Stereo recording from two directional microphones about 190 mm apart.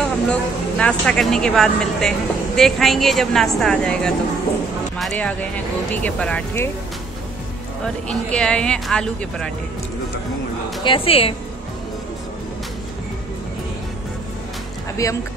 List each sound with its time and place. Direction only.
0.0 s speech: 5° left (ahead or behind)
7.8 s speech: 5° left (ahead or behind)
10.8 s a woman's voice: 30° left (ahead or behind)